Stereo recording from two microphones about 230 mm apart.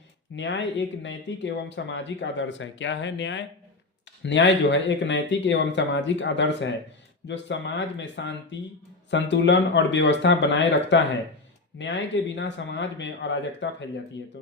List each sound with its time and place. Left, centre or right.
0.3 s speech: left